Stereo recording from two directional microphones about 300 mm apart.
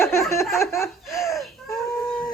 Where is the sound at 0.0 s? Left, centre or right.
Centre.